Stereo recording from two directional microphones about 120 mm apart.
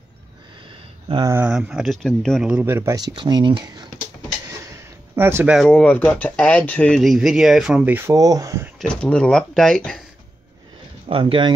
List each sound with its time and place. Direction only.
1.4 s speech: 5° right (ahead or behind)
2.4 s speech: 10° right (ahead or behind)
2.7 s speech: 20° right (ahead or behind)
3.0 s speech: 35° right (ahead or behind)
3.6 s a sound: 35° right (ahead or behind)
5.1 s speech: 15° right (ahead or behind)
5.7 s speech: 10° left (ahead or behind)
7.0 s speech: centre (ahead or behind)
8.1 s speech: 30° right (ahead or behind)
8.7 s speech: 10° left (ahead or behind)
11.1 s speech: 50° right (ahead or behind)